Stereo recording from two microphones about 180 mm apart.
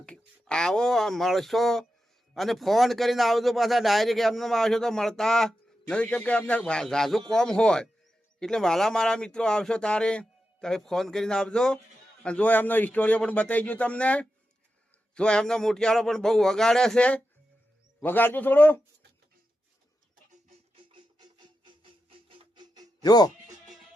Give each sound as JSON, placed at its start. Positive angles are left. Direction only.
{"t": 0.0, "sound": "speech", "side_deg": 5}
{"t": 20.5, "sound": "music", "side_deg": -25}
{"t": 23.0, "sound": "speech", "side_deg": 20}